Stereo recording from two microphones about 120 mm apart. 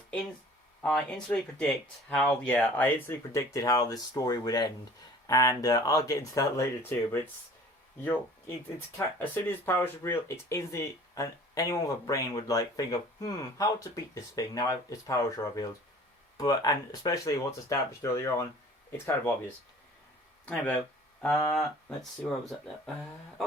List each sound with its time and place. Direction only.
0.8 s speech: 5° left (ahead or behind)
9.0 s speech: 20° left (ahead or behind)
20.4 s speech: 10° left (ahead or behind)